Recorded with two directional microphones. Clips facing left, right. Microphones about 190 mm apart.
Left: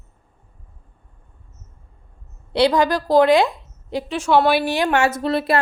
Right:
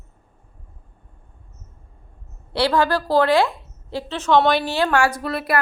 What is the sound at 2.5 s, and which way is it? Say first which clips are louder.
A woman's voice: left 2 dB; 20° left (ahead or behind).